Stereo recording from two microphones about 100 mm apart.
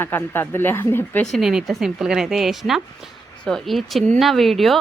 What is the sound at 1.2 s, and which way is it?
A woman's voice, centre (ahead or behind).